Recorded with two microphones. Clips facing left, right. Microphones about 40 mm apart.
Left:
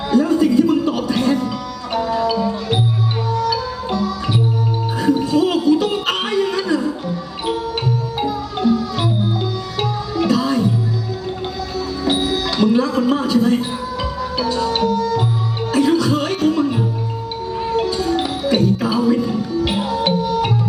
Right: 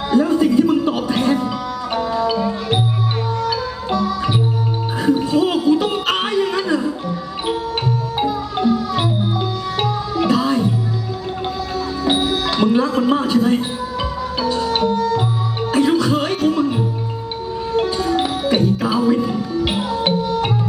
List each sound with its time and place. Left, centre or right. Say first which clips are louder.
0.1 s music: even; right
5.0 s music: even; right
8.2 s music: right 1 dB; right
10.2 s music: even; right
12.0 s music: right 1 dB; right
13.1 s a sound: even; right
14.0 s music: even; right
17.7 s music: right 2 dB; right
18.9 s music: even; centre